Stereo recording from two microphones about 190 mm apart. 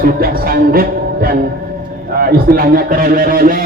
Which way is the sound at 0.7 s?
50° right (ahead or behind).